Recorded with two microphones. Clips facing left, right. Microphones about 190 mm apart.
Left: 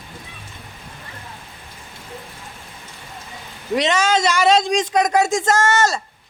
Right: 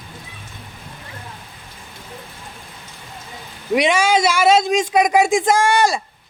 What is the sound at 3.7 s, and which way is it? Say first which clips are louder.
A man's voice: right 2 dB; 10° right (ahead or behind).